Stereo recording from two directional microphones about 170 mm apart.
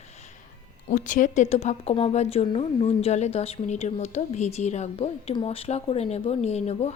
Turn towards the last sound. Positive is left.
turn(degrees=40)  # may be behind; listen again after turning